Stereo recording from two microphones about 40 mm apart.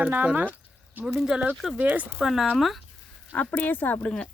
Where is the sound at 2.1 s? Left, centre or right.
Centre.